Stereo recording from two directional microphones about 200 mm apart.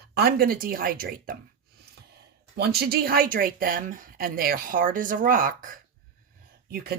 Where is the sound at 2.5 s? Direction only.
50° right (ahead or behind).